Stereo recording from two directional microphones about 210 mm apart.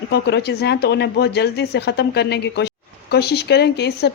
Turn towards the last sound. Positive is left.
turn(degrees=50)  # may be behind; listen again after turning